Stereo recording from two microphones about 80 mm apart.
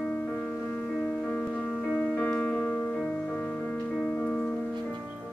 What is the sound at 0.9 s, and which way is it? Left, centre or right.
Music, centre.